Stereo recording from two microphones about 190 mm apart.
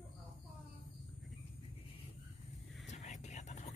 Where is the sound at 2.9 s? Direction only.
40° left (ahead or behind).